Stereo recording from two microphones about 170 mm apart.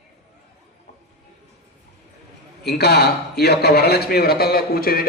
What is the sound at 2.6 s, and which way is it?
A man's voice, 70° left (ahead or behind).